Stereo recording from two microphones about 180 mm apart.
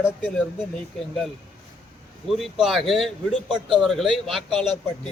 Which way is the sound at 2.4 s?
Centre (ahead or behind).